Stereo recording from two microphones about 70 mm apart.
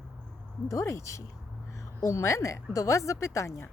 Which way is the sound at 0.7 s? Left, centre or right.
Left.